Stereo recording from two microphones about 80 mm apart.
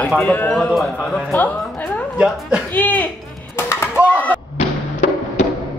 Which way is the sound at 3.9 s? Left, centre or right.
Centre.